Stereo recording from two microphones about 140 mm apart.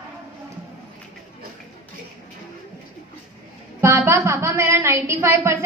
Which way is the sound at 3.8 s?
15° right (ahead or behind).